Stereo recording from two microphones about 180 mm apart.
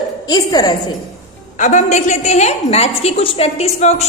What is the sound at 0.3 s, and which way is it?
Speech, 20° left (ahead or behind).